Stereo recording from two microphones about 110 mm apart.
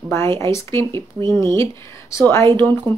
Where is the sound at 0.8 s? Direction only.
45° right (ahead or behind).